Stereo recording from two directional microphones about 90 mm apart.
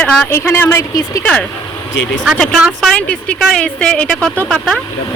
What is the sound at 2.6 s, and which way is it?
Speech, 5° right (ahead or behind).